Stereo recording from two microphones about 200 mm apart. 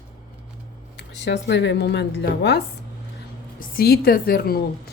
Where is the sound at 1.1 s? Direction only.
60° left (ahead or behind).